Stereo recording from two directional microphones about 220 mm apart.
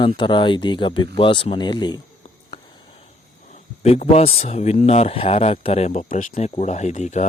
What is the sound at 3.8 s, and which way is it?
Speech, 30° left (ahead or behind).